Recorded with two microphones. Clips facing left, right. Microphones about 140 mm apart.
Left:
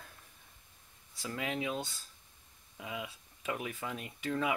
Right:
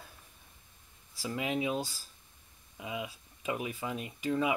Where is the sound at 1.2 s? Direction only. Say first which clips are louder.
Right 4 dB; 20° right (ahead or behind).